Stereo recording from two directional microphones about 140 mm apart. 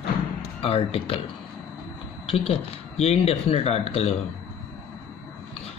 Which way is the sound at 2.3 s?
45° left (ahead or behind).